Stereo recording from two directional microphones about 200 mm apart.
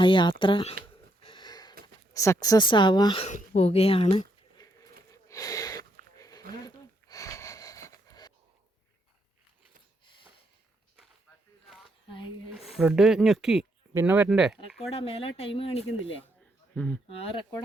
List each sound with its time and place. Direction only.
0.0 s speech: 25° left (ahead or behind)
1.2 s sniff: 25° left (ahead or behind)
2.1 s speech: 15° left (ahead or behind)
3.2 s speech: 35° left (ahead or behind)
5.1 s snort: 15° left (ahead or behind)
6.1 s a sound: 15° left (ahead or behind)
12.5 s speech: centre (ahead or behind)
14.9 s speech: 30° left (ahead or behind)
16.7 s speech: 10° left (ahead or behind)
17.1 s speech: 25° left (ahead or behind)